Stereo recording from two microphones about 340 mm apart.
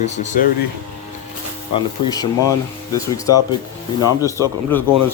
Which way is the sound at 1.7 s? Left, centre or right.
Centre.